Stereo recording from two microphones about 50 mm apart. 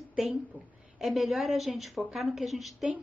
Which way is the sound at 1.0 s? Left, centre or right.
Centre.